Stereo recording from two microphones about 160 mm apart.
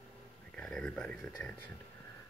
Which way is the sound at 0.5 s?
5° left (ahead or behind).